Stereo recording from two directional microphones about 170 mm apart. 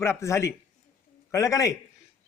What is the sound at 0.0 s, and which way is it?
A man's voice, 15° left (ahead or behind).